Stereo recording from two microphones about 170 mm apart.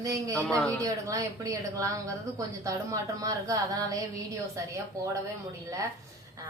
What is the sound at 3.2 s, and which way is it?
Speech, 20° right (ahead or behind).